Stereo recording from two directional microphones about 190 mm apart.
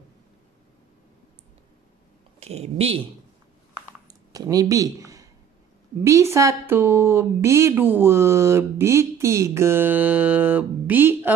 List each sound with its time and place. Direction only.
2.4 s speech: 35° right (ahead or behind)
4.3 s a sound: 20° right (ahead or behind)
6.0 s speech: 15° right (ahead or behind)